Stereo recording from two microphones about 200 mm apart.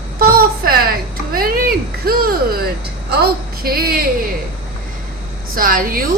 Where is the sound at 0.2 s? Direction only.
45° right (ahead or behind).